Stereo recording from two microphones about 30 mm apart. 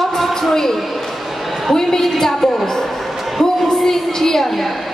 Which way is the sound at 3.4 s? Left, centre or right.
Centre.